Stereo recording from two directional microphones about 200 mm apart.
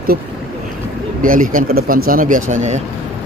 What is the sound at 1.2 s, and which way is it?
Speech, 45° right (ahead or behind).